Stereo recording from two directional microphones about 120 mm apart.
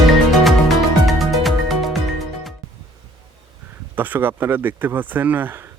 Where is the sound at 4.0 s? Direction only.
15° right (ahead or behind).